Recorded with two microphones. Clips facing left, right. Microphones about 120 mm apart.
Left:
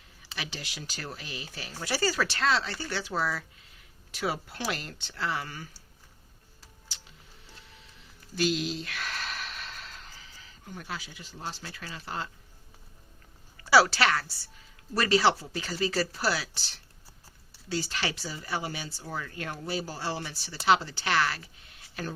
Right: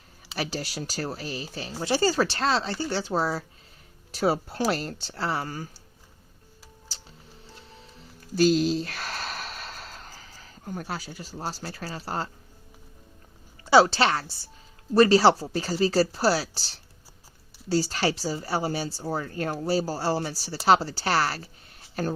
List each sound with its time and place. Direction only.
0.3 s speech: 40° right (ahead or behind)
6.9 s music: 35° right (ahead or behind)
13.7 s a woman's voice: 25° right (ahead or behind)